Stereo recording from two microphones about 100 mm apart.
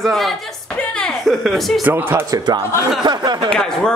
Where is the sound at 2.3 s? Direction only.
45° right (ahead or behind).